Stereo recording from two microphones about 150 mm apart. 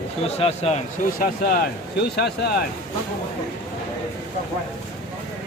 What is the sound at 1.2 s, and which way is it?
Speech, 75° left (ahead or behind).